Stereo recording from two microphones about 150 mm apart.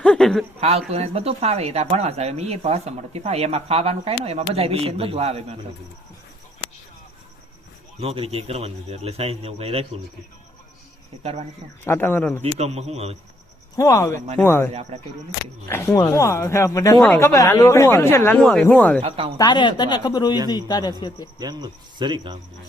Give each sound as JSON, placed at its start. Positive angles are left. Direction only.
{"t": 0.0, "sound": "a sound", "side_deg": 5}
{"t": 0.9, "sound": "speech", "side_deg": -45}
{"t": 8.0, "sound": "speech", "side_deg": -40}
{"t": 11.2, "sound": "speech", "side_deg": -40}
{"t": 11.9, "sound": "a woman's voice", "side_deg": 15}
{"t": 12.4, "sound": "speech", "side_deg": -45}
{"t": 13.7, "sound": "a woman's voice", "side_deg": 20}
{"t": 14.7, "sound": "speech", "side_deg": -45}
{"t": 15.6, "sound": "a woman's voice", "side_deg": 20}
{"t": 19.0, "sound": "speech", "side_deg": -40}
{"t": 19.4, "sound": "speech", "side_deg": 30}
{"t": 21.3, "sound": "speech", "side_deg": -25}